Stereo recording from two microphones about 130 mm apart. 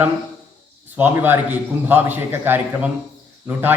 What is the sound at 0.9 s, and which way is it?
A man's voice, 15° right (ahead or behind).